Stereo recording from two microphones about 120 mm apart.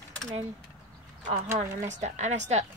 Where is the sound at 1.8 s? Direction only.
75° right (ahead or behind).